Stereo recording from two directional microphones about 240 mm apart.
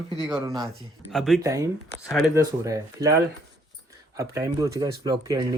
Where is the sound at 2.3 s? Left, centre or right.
Centre.